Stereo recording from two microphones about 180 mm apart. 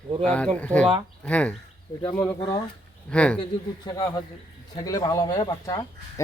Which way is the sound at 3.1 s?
5° left (ahead or behind).